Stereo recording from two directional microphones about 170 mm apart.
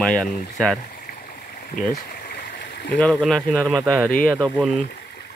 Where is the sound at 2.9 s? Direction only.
5° left (ahead or behind).